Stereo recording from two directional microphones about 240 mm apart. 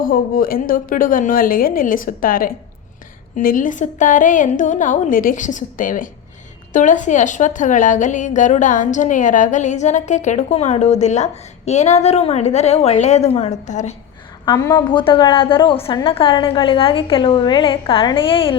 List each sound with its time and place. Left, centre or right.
0.0 s a woman's voice: left
14.4 s a woman's voice: centre